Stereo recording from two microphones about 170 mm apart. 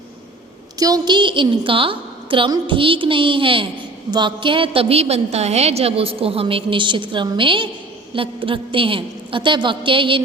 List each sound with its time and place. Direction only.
0.8 s a woman's voice: 20° right (ahead or behind)